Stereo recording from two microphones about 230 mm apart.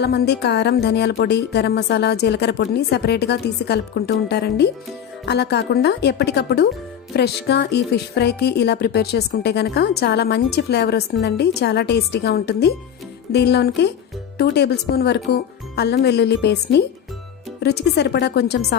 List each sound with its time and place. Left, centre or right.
0.0 s speech: left